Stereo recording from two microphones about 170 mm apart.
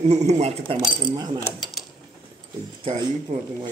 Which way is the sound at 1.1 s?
25° right (ahead or behind).